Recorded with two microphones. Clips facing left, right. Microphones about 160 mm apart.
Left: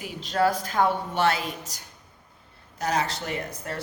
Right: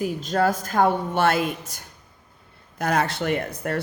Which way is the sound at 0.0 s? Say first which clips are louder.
Right 2 dB; 45° right (ahead or behind).